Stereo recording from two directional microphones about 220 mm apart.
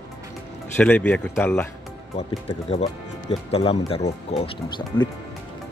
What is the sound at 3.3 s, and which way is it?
Speech, 30° left (ahead or behind).